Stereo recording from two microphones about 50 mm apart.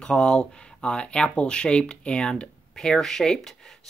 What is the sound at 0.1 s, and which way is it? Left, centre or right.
Speech, centre.